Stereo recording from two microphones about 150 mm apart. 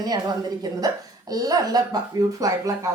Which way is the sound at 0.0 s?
25° right (ahead or behind).